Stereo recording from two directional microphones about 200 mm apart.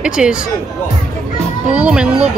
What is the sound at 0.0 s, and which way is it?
Speech, 5° right (ahead or behind).